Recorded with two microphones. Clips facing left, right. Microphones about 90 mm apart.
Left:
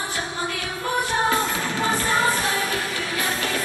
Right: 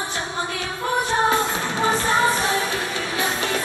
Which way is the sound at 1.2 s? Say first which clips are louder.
Right 2 dB; 20° right (ahead or behind).